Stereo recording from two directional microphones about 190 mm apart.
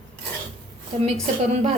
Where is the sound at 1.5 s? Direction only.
35° right (ahead or behind).